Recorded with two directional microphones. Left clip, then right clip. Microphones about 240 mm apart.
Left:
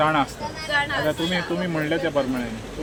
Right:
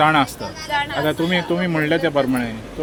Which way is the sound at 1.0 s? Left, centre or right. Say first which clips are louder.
Right 4 dB; right.